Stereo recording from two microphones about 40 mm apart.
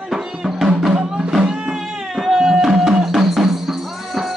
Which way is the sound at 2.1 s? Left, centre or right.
Centre.